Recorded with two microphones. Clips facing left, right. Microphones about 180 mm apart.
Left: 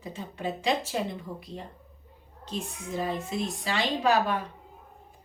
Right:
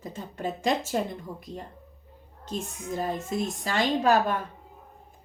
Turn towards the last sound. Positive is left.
turn(degrees=-45)  # may be behind; listen again after turning